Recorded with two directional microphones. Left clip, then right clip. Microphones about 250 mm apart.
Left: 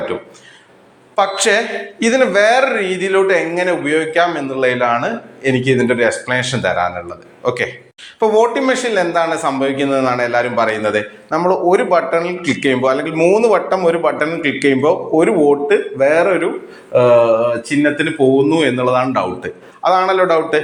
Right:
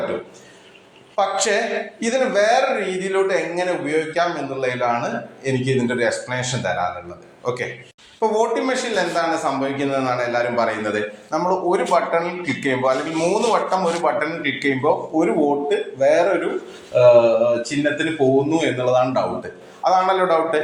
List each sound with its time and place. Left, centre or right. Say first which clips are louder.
1.1 s speech: left 5 dB; left